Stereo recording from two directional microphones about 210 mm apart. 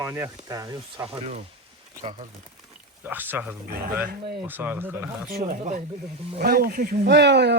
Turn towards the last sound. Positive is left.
turn(degrees=-55)  # may be behind; listen again after turning